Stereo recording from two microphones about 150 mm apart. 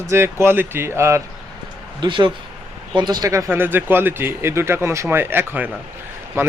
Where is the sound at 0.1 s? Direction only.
15° right (ahead or behind).